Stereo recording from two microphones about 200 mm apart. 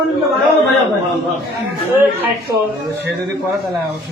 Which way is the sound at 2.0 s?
10° right (ahead or behind).